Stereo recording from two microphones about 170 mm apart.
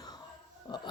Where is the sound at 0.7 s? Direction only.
25° left (ahead or behind).